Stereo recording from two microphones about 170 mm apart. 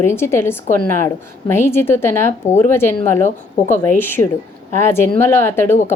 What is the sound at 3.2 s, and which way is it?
Speech, 45° left (ahead or behind).